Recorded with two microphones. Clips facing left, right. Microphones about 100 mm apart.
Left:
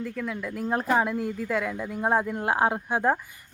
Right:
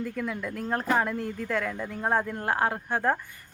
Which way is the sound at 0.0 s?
Centre (ahead or behind).